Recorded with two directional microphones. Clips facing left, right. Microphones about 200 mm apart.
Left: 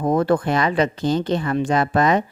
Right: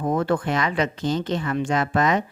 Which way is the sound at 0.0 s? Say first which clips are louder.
Left 4 dB; 40° left (ahead or behind).